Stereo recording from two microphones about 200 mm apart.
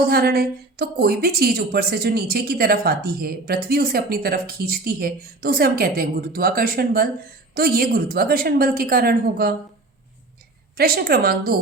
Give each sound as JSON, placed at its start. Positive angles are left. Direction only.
{"t": 0.1, "sound": "a woman's voice", "side_deg": -50}
{"t": 10.8, "sound": "a woman's voice", "side_deg": -50}